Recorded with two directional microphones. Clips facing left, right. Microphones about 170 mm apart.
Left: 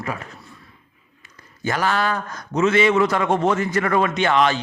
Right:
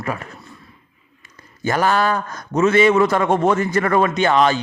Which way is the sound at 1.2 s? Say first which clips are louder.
Right 3 dB; 45° right (ahead or behind).